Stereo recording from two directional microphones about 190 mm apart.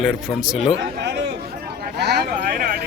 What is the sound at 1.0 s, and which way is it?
Chatter, 65° right (ahead or behind).